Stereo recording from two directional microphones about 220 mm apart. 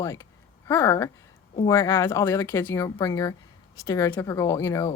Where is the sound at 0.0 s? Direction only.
15° left (ahead or behind).